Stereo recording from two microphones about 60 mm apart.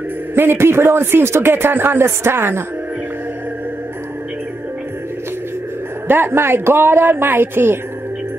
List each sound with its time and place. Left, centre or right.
0.3 s speech: right
6.0 s speech: right